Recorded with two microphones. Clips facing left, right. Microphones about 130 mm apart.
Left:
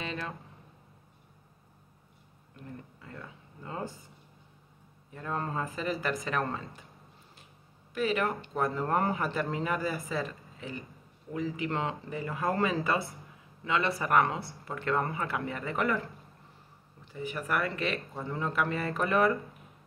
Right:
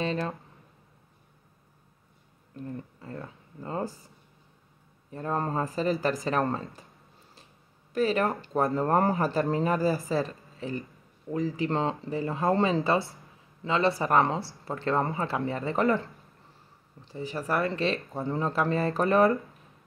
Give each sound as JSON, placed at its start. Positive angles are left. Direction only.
{"t": 0.0, "sound": "speech", "side_deg": -35}
{"t": 2.5, "sound": "speech", "side_deg": -35}
{"t": 5.1, "sound": "speech", "side_deg": -35}
{"t": 7.9, "sound": "speech", "side_deg": -35}